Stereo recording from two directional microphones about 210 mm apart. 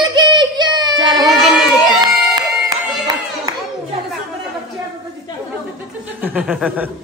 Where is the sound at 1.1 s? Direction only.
Centre (ahead or behind).